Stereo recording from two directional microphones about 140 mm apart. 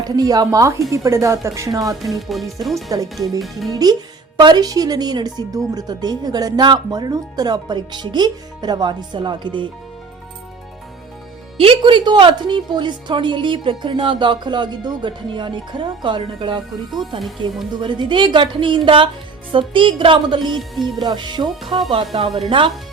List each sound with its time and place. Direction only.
0.0 s speech: 25° right (ahead or behind)
2.0 s speech: centre (ahead or behind)
2.9 s a woman's voice: 25° right (ahead or behind)
11.5 s a woman's voice: 40° right (ahead or behind)
20.6 s speech: centre (ahead or behind)
21.0 s a woman's voice: 30° right (ahead or behind)